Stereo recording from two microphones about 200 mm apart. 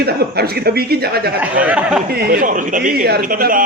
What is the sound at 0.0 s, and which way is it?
A man's voice, 50° right (ahead or behind).